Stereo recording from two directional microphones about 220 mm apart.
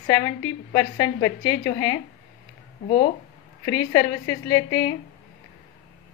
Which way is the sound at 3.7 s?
15° left (ahead or behind).